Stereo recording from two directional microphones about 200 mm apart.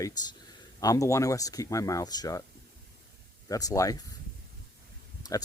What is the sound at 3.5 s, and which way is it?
Speech, 15° left (ahead or behind).